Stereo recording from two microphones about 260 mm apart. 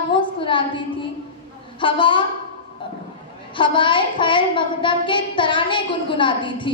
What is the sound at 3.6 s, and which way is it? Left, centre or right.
Speech, centre.